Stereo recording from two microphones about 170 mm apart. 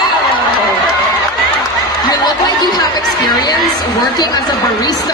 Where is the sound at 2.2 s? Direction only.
25° left (ahead or behind).